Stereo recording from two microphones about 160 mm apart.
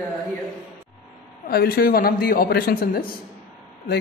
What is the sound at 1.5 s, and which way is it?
A man's voice, 75° left (ahead or behind).